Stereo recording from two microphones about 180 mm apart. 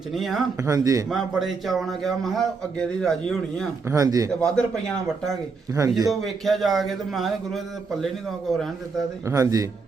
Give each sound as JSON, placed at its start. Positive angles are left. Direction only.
{"t": 0.1, "sound": "a man's voice", "side_deg": 0}
{"t": 0.6, "sound": "speech", "side_deg": -20}
{"t": 1.1, "sound": "a man's voice", "side_deg": 0}
{"t": 3.8, "sound": "speech", "side_deg": -20}
{"t": 4.3, "sound": "a man's voice", "side_deg": 5}
{"t": 6.1, "sound": "a man's voice", "side_deg": 0}
{"t": 9.2, "sound": "a man's voice", "side_deg": -20}